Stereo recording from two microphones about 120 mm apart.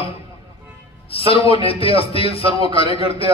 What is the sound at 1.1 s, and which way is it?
A man's voice, 50° left (ahead or behind).